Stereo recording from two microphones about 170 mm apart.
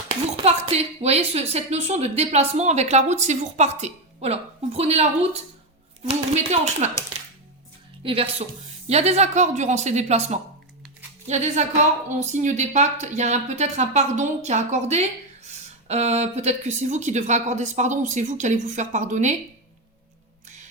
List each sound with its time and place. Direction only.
0.4 s a woman's voice: 35° right (ahead or behind)
8.0 s a woman's voice: 35° right (ahead or behind)